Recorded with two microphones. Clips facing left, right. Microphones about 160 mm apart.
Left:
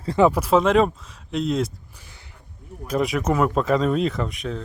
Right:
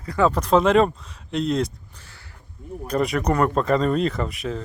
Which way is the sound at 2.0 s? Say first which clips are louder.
Even; 15° left (ahead or behind).